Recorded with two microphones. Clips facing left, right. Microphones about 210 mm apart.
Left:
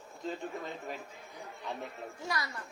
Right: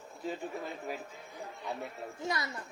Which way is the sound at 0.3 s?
10° right (ahead or behind).